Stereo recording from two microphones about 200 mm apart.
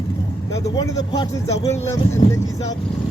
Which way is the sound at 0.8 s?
20° left (ahead or behind).